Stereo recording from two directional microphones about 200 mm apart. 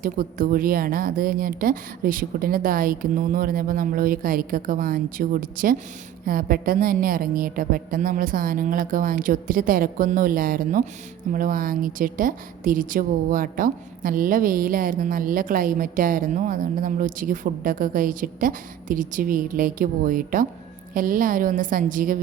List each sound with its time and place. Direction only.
0.0 s a woman's voice: 45° right (ahead or behind)